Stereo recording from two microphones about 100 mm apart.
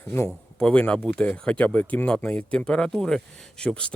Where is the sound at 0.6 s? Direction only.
10° left (ahead or behind).